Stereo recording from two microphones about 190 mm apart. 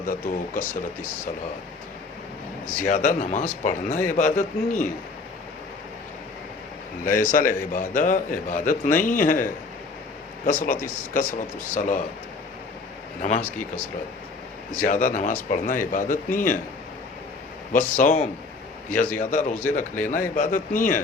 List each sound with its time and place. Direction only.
0.0 s a man's voice: 45° left (ahead or behind)
2.8 s a man's voice: 45° left (ahead or behind)
7.0 s a man's voice: 45° left (ahead or behind)
14.8 s a man's voice: 40° left (ahead or behind)
17.7 s a man's voice: 45° left (ahead or behind)